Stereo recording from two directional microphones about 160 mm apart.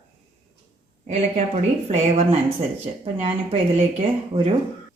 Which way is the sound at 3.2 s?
40° right (ahead or behind).